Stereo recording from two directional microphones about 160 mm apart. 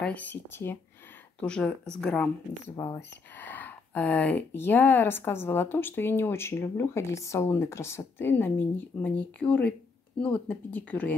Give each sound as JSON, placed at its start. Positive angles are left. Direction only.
{"t": 0.0, "sound": "speech", "side_deg": 10}
{"t": 2.7, "sound": "speech", "side_deg": 30}
{"t": 3.0, "sound": "speech", "side_deg": 10}